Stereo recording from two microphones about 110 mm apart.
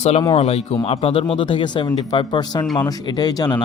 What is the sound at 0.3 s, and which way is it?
A man's voice, 65° left (ahead or behind).